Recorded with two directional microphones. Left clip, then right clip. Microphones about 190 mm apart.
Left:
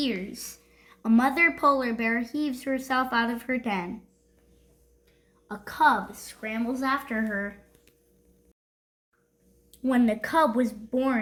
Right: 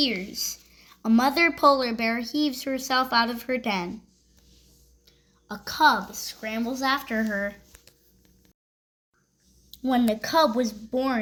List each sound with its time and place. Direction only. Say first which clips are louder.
0.0 s speech: right 5 dB; 25° right (ahead or behind)
5.0 s speech: right 1 dB; 40° right (ahead or behind)
9.7 s a woman's voice: right 1 dB; 10° right (ahead or behind)